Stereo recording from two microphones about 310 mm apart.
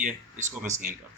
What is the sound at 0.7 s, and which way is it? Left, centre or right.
Speech, centre.